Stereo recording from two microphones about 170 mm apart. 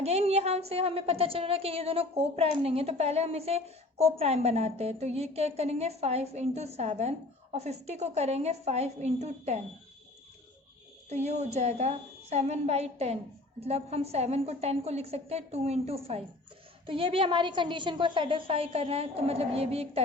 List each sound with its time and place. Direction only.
0.0 s a woman's voice: 40° right (ahead or behind)
11.1 s a woman's voice: 40° right (ahead or behind)